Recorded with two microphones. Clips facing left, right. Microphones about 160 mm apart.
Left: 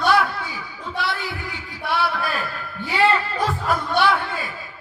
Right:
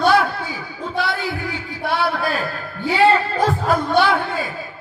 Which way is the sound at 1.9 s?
45° right (ahead or behind).